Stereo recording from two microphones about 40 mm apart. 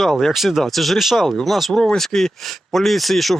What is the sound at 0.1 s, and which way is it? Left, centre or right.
Speech, centre.